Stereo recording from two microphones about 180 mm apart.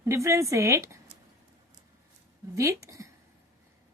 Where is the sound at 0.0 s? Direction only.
15° right (ahead or behind).